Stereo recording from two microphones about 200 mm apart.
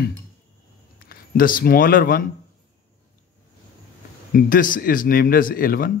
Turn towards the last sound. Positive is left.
turn(degrees=45)  # may be behind; listen again after turning